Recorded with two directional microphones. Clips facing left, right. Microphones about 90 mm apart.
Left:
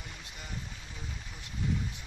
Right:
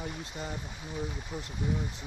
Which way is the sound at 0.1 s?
35° right (ahead or behind).